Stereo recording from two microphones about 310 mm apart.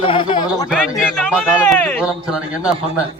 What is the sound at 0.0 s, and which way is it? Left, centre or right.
Speech, centre.